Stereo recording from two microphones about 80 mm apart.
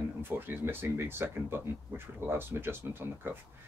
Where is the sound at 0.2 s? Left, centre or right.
Right.